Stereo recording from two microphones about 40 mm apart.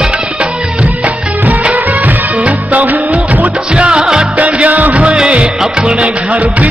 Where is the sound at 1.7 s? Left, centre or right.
Right.